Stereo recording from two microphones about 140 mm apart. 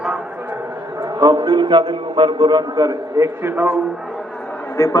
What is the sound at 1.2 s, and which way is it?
A man's voice, 25° right (ahead or behind).